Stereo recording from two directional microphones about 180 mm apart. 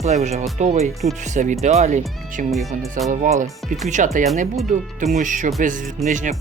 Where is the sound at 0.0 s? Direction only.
40° right (ahead or behind).